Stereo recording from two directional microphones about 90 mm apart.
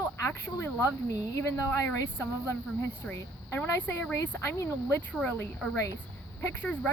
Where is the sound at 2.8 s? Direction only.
25° left (ahead or behind).